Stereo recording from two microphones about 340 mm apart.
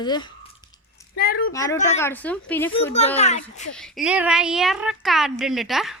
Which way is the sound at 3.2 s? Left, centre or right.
Centre.